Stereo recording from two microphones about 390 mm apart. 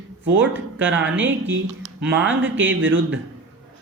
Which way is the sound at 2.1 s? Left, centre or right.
Right.